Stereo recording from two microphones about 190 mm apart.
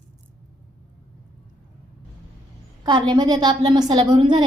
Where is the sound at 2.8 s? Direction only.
20° right (ahead or behind).